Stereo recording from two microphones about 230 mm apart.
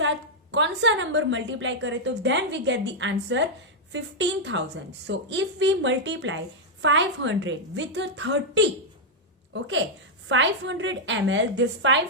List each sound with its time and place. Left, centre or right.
0.5 s a woman's voice: right